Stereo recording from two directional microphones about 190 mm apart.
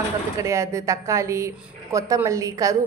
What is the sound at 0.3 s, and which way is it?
A woman's voice, 15° right (ahead or behind).